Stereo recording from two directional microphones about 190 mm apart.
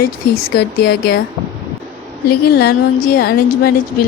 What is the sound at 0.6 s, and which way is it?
Speech, 55° left (ahead or behind).